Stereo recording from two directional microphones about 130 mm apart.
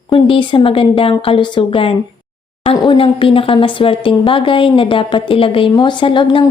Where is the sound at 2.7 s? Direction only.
30° left (ahead or behind).